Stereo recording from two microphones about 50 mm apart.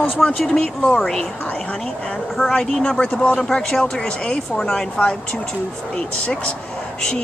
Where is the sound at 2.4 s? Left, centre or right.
Centre.